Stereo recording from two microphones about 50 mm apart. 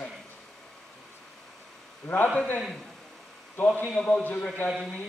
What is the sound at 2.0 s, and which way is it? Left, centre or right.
Speech, left.